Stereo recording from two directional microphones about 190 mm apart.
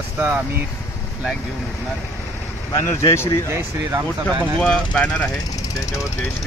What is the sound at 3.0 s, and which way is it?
Speech, 15° left (ahead or behind).